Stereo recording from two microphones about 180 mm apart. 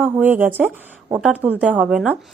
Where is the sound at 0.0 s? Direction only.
10° right (ahead or behind).